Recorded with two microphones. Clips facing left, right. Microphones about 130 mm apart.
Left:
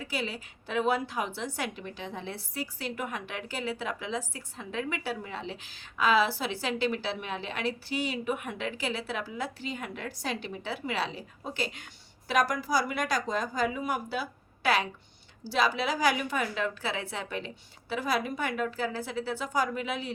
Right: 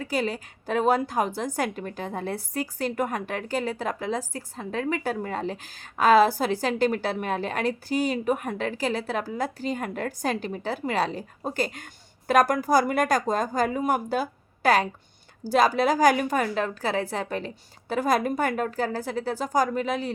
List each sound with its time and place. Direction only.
0.0 s a woman's voice: 45° right (ahead or behind)